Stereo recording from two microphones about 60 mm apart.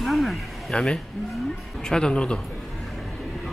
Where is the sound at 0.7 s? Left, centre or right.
Centre.